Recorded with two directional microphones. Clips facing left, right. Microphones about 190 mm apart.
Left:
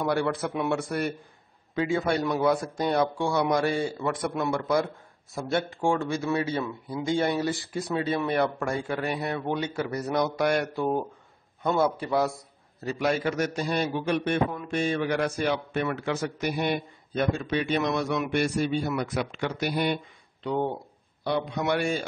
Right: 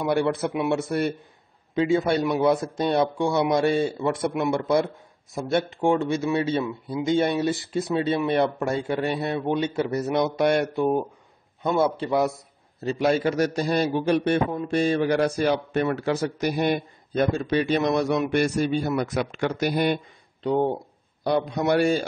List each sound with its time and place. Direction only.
0.0 s speech: 20° right (ahead or behind)
12.8 s a man's voice: 30° right (ahead or behind)